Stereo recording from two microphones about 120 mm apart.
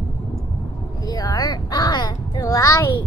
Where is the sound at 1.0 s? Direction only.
30° left (ahead or behind).